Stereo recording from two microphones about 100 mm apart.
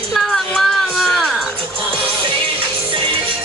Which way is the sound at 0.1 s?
5° left (ahead or behind).